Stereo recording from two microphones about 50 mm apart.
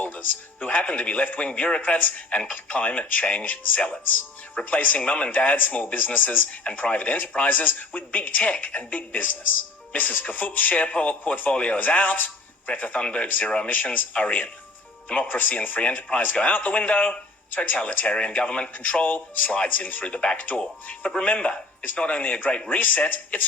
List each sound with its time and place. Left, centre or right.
0.6 s speech: left